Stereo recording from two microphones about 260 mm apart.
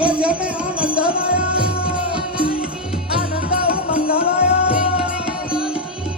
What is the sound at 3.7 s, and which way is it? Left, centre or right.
Music, left.